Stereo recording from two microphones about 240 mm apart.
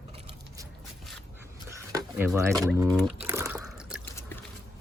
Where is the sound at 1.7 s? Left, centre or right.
Centre.